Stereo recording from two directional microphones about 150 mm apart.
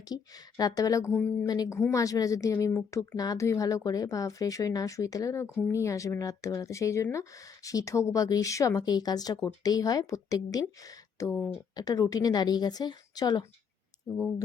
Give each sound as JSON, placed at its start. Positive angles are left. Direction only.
{"t": 0.1, "sound": "speech", "side_deg": 25}
{"t": 1.5, "sound": "speech", "side_deg": 25}